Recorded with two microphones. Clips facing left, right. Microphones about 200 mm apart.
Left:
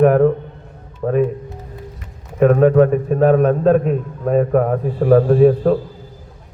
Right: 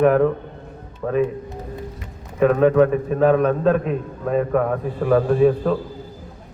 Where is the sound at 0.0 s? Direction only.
40° left (ahead or behind).